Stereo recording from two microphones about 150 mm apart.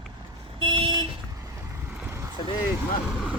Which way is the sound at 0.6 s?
35° right (ahead or behind).